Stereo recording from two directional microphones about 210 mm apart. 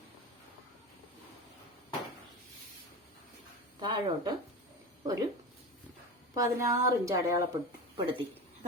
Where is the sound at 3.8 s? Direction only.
20° right (ahead or behind).